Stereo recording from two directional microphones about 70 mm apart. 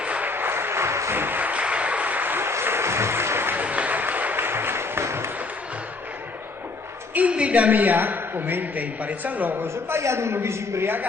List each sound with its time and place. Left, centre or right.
0.0 s applause: centre
3.6 s applause: right
7.1 s a woman's voice: centre
10.0 s a man's voice: right